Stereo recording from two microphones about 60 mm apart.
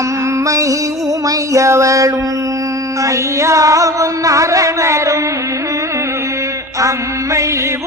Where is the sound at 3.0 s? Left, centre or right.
Right.